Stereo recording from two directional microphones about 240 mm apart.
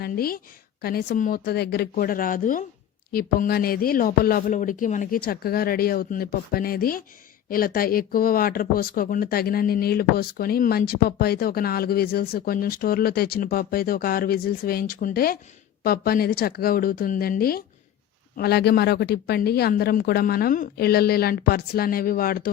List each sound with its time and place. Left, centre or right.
0.0 s speech: left